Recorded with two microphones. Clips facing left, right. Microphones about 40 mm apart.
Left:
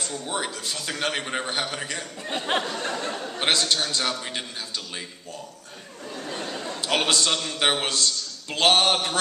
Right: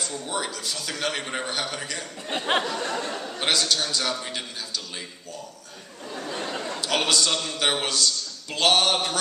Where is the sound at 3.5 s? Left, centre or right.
Left.